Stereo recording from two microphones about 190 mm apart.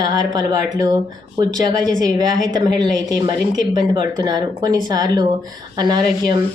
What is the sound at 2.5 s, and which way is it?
Speech, 20° right (ahead or behind).